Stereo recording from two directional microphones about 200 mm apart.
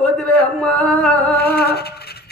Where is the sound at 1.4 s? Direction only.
55° left (ahead or behind).